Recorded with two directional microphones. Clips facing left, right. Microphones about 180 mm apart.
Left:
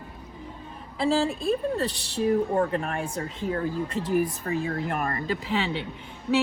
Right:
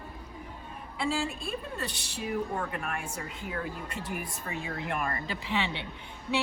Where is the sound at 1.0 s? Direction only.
35° left (ahead or behind).